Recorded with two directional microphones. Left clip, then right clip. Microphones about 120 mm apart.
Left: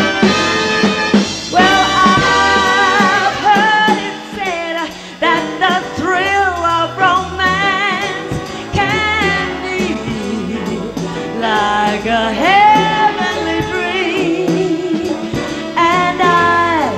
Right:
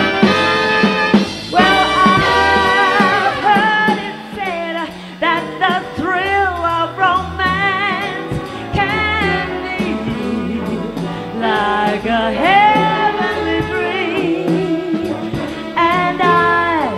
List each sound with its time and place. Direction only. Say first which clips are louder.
0.0 s music: even; 40° right (ahead or behind)
5.2 s music: left 2 dB; 40° right (ahead or behind)
11.4 s music: left 1 dB; 40° right (ahead or behind)
15.7 s music: left 2 dB; 40° right (ahead or behind)